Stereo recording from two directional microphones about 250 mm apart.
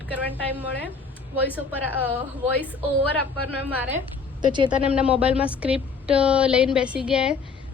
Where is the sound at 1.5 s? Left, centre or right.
Centre.